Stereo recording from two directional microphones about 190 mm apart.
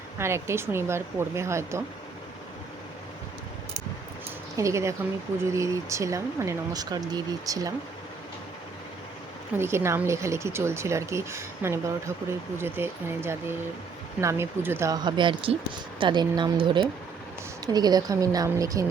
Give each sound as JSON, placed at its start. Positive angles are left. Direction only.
{"t": 0.2, "sound": "speech", "side_deg": -15}
{"t": 4.5, "sound": "speech", "side_deg": -15}
{"t": 9.6, "sound": "speech", "side_deg": -15}